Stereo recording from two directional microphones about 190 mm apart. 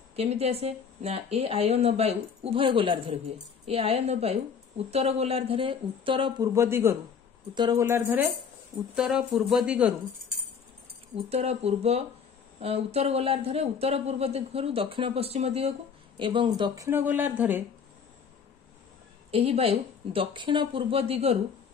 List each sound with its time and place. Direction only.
0.1 s a woman's voice: 35° right (ahead or behind)
7.8 s speech: 10° right (ahead or behind)
11.2 s a woman's voice: 35° right (ahead or behind); by 17.6 s 10° right (ahead or behind)
19.3 s speech: 30° right (ahead or behind)